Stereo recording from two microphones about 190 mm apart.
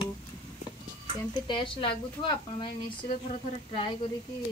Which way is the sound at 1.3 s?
25° left (ahead or behind).